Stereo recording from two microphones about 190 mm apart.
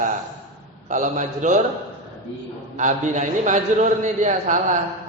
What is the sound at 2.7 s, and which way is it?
A man's voice, 40° right (ahead or behind).